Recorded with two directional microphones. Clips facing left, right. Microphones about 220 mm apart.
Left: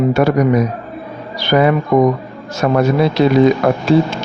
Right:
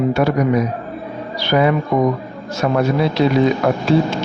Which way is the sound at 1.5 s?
55° left (ahead or behind).